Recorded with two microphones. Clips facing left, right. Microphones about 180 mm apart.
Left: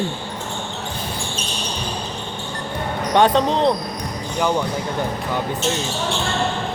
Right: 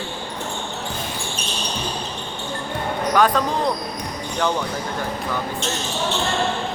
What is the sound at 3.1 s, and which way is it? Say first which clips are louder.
Speech: left 4 dB; 25° left (ahead or behind).